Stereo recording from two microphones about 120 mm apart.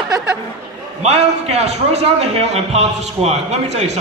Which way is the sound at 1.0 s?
60° right (ahead or behind).